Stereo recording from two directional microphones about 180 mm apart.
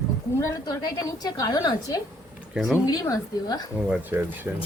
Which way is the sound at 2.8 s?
20° left (ahead or behind).